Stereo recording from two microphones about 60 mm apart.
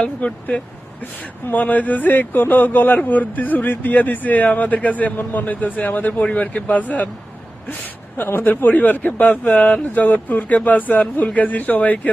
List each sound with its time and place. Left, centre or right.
0.0 s a man's voice: left
8.2 s a man's voice: left